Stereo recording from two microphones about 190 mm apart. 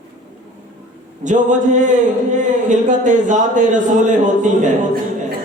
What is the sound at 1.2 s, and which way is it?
Speech, 40° right (ahead or behind).